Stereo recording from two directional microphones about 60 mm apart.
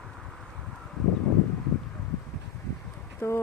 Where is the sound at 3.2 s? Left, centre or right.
Left.